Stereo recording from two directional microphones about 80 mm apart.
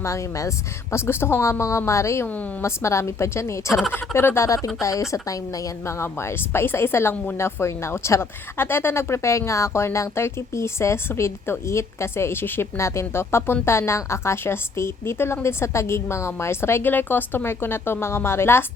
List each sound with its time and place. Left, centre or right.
0.0 s speech: left
2.2 s a woman's voice: centre
2.6 s speech: left
4.4 s speech: left